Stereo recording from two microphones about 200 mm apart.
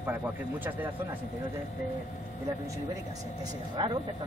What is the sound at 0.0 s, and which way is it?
Speech, 10° right (ahead or behind).